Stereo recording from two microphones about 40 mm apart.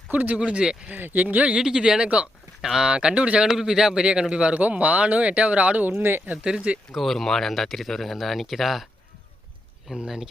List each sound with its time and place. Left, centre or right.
0.1 s speech: right
0.3 s speech: right
0.9 s speech: right
1.5 s speech: right
2.6 s a man's voice: centre
3.4 s a man's voice: centre
4.5 s speech: right
6.0 s speech: right
6.9 s speech: centre
9.9 s a man's voice: centre